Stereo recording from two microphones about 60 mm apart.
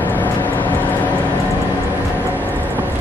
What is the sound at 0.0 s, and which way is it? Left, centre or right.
Vehicle, left.